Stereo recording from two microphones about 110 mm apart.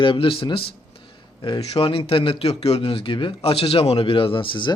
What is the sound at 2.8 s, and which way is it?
Speech, 50° left (ahead or behind).